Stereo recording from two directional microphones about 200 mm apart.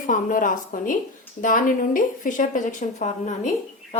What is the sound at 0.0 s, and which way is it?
A woman's voice, 40° left (ahead or behind).